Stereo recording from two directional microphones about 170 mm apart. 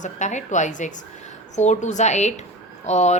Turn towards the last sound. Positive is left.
turn(degrees=40)  # may be behind; listen again after turning